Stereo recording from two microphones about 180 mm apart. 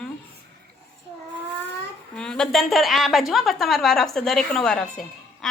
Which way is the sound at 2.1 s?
5° left (ahead or behind).